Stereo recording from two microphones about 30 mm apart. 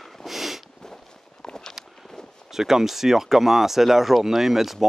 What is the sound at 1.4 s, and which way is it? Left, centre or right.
Walk, centre.